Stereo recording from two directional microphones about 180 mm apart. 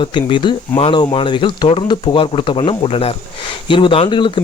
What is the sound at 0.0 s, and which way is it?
Speech, 25° left (ahead or behind).